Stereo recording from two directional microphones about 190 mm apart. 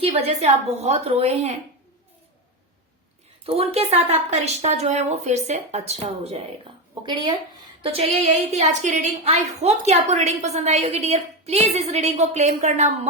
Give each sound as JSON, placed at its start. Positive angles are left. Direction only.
{"t": 0.3, "sound": "a woman's voice", "side_deg": -35}
{"t": 3.4, "sound": "a woman's voice", "side_deg": -30}
{"t": 7.0, "sound": "a woman's voice", "side_deg": -20}